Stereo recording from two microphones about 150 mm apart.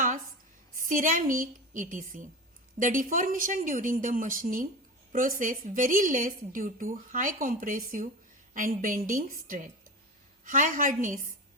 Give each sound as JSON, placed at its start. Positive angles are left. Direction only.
{"t": 0.8, "sound": "a woman's voice", "side_deg": -65}